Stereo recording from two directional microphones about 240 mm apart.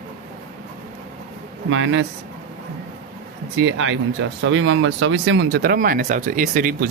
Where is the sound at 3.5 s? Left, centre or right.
Right.